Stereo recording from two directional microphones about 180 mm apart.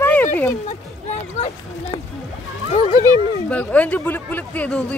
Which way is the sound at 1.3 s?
40° left (ahead or behind).